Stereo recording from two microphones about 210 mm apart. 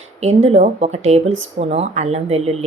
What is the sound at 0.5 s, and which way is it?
Speech, 30° right (ahead or behind).